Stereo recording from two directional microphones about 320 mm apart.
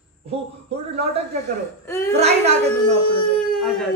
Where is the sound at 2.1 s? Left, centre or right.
Centre.